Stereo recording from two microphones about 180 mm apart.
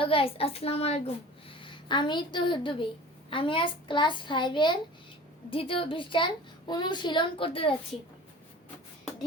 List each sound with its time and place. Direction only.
0.0 s a woman's voice: 30° left (ahead or behind)